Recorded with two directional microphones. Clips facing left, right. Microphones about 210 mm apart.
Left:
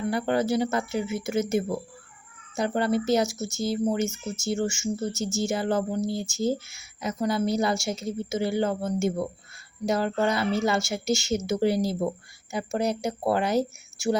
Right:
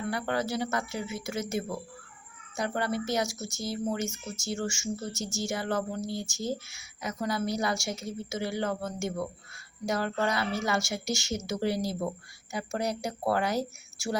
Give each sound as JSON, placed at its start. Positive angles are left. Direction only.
{"t": 0.0, "sound": "speech", "side_deg": 25}